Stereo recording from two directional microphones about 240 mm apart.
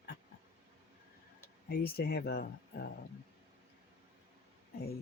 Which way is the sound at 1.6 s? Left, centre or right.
Left.